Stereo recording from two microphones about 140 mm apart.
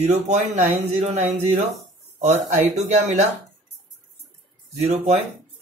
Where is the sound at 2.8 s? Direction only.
55° right (ahead or behind).